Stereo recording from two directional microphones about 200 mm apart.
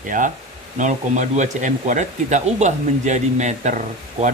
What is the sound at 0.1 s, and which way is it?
Speech, 40° right (ahead or behind).